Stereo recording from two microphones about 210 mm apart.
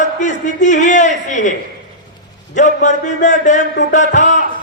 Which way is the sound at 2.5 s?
35° left (ahead or behind).